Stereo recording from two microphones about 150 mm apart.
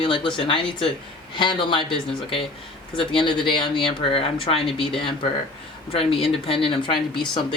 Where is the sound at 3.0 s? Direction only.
35° left (ahead or behind).